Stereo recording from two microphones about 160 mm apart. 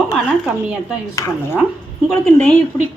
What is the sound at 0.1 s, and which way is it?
Speech, 5° right (ahead or behind).